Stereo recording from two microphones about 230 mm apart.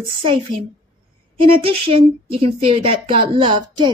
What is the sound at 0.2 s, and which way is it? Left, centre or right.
A woman's voice, right.